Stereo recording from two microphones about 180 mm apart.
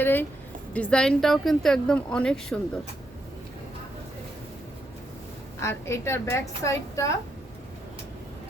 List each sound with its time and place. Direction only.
0.0 s a woman's voice: 10° left (ahead or behind)
5.5 s a woman's voice: 15° left (ahead or behind)